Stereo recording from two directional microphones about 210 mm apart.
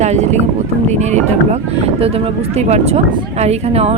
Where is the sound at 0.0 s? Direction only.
35° right (ahead or behind).